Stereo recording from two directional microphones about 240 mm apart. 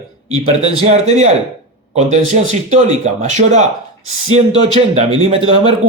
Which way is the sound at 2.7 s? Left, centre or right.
Right.